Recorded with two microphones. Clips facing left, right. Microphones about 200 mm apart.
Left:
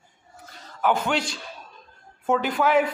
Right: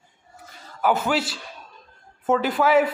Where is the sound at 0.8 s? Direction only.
5° right (ahead or behind).